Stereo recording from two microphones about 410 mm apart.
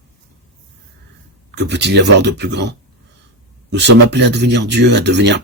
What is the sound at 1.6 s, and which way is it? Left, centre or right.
Speech, right.